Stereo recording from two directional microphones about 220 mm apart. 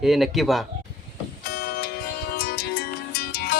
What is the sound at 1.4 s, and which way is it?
Music, 45° left (ahead or behind).